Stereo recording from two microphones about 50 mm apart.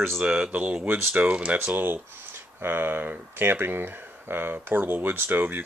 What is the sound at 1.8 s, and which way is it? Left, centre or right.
Speech, right.